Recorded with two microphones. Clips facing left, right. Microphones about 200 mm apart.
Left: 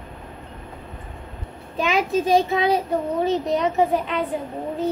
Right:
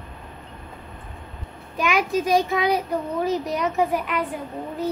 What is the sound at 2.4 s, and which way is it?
A woman's voice, 30° left (ahead or behind).